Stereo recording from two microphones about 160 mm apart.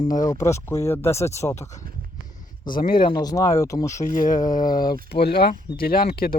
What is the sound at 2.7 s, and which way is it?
Speech, 60° left (ahead or behind).